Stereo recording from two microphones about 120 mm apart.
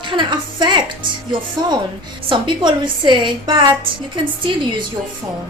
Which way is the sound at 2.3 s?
40° right (ahead or behind).